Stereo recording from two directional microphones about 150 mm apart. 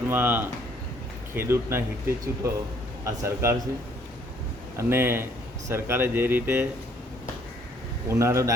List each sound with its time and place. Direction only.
0.1 s speech: 10° right (ahead or behind)
4.8 s speech: 15° right (ahead or behind)
8.0 s speech: 20° right (ahead or behind)